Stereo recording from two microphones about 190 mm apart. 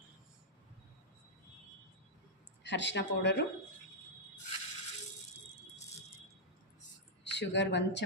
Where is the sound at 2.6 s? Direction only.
70° left (ahead or behind).